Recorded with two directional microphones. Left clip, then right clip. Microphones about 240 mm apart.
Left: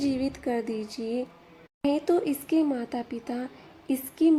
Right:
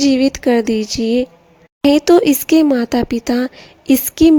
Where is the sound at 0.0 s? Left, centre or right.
Right.